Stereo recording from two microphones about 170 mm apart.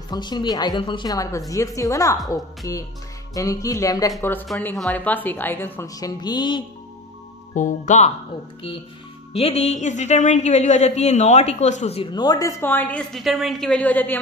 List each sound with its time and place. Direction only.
0.1 s speech: 25° left (ahead or behind)
7.5 s speech: 45° left (ahead or behind)
9.3 s speech: 35° left (ahead or behind)
12.1 s speech: 25° left (ahead or behind)